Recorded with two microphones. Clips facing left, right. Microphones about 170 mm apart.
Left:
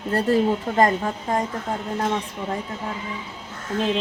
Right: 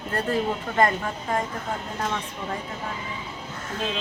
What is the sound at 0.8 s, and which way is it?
Speech, 35° left (ahead or behind).